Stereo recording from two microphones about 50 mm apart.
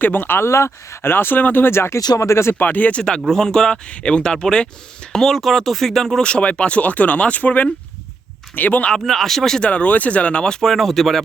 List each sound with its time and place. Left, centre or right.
0.0 s speech: left
1.0 s speech: left
2.6 s speech: left
3.2 s speech: centre
6.2 s speech: left
9.0 s speech: centre
9.6 s speech: left; by 11.2 s centre